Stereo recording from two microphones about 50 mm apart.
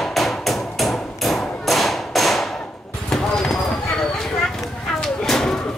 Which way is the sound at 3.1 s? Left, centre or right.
Centre.